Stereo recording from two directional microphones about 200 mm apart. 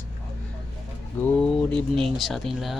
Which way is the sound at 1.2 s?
5° left (ahead or behind).